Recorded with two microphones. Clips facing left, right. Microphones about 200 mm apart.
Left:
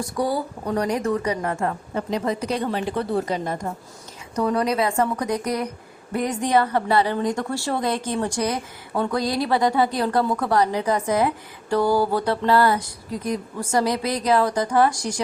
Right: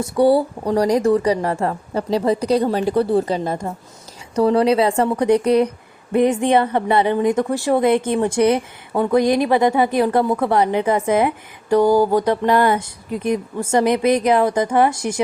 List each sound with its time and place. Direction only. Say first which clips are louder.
0.0 s speech: right 9 dB; 30° right (ahead or behind)